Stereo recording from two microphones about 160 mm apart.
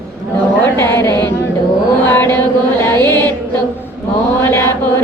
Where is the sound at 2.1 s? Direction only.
15° left (ahead or behind).